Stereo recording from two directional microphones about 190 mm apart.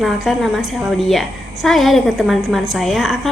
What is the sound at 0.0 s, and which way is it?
A woman's voice, centre (ahead or behind).